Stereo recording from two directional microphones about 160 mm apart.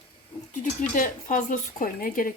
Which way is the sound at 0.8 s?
55° left (ahead or behind).